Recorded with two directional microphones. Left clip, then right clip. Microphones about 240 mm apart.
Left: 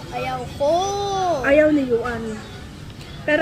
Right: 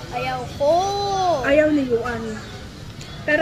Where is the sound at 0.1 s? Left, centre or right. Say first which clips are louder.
Right 1 dB; centre.